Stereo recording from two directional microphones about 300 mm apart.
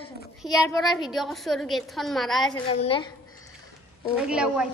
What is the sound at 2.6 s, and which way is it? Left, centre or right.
Speech, centre.